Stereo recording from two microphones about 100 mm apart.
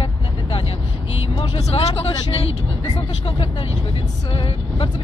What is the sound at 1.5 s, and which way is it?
Speech, 70° left (ahead or behind).